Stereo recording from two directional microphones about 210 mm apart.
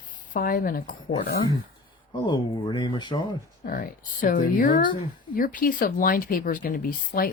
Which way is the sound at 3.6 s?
45° left (ahead or behind).